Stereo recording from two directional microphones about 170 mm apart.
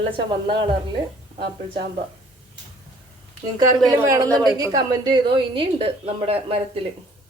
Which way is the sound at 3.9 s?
15° right (ahead or behind).